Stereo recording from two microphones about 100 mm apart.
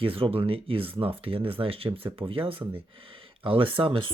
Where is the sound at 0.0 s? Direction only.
65° right (ahead or behind).